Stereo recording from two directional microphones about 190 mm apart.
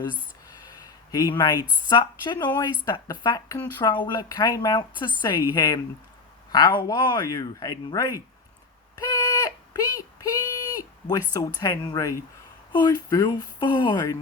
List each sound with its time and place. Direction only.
1.1 s speech: 15° left (ahead or behind)
9.0 s a sound: 15° left (ahead or behind)
11.3 s speech: 20° left (ahead or behind)